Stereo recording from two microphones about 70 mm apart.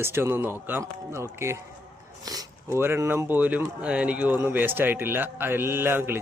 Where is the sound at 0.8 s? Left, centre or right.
Right.